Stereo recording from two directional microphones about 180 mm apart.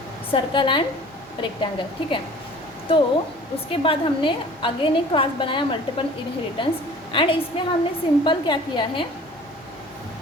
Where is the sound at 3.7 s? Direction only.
30° left (ahead or behind).